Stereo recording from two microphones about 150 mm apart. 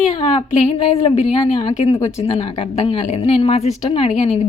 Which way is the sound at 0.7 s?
40° left (ahead or behind).